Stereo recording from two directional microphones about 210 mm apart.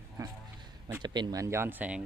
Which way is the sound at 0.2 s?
15° right (ahead or behind).